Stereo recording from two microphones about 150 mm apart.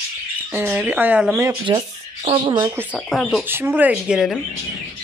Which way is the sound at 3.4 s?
15° right (ahead or behind).